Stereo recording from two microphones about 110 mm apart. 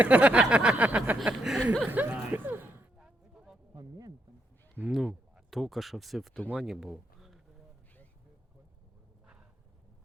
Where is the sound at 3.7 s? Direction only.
35° right (ahead or behind).